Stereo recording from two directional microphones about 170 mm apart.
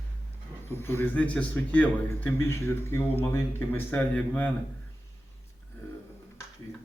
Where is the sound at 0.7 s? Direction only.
15° left (ahead or behind).